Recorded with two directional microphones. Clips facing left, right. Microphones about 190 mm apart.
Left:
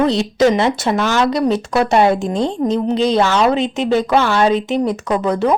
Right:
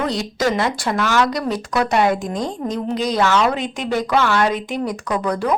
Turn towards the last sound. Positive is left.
turn(degrees=25)  # may be behind; listen again after turning